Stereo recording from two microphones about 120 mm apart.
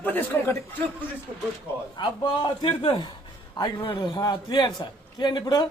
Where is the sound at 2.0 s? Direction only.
40° left (ahead or behind).